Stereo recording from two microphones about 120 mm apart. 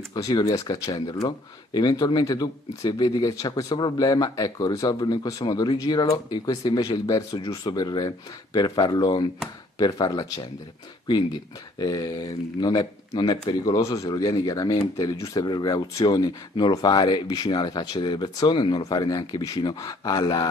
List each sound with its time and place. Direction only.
0.1 s speech: 35° left (ahead or behind)
11.8 s speech: 35° left (ahead or behind)